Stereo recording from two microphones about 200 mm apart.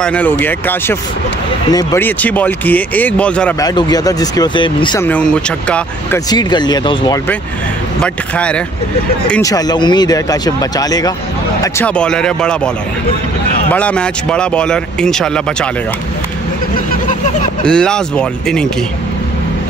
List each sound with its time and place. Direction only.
0.0 s speech: 5° left (ahead or behind)
3.5 s speech: 20° left (ahead or behind)
5.0 s speech: 5° left (ahead or behind)
6.1 s speech: 20° left (ahead or behind)
8.0 s speech: 5° left (ahead or behind)
9.4 s speech: 20° left (ahead or behind)
11.6 s speech: 5° left (ahead or behind)
17.6 s speech: 5° left (ahead or behind)